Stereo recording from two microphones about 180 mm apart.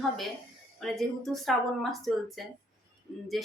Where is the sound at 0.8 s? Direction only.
Centre (ahead or behind).